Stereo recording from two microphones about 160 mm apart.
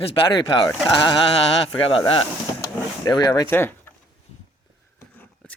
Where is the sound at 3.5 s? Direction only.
15° left (ahead or behind).